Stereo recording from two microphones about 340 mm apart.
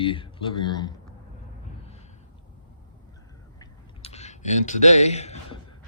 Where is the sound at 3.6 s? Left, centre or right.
Centre.